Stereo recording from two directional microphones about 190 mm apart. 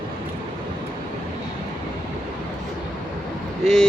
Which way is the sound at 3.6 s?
Centre (ahead or behind).